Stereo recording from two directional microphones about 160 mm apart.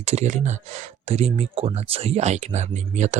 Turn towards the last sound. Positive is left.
turn(degrees=-45)  # may be behind; listen again after turning